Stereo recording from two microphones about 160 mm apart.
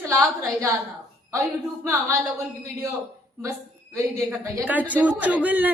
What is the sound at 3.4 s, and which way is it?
A woman's voice, 20° right (ahead or behind).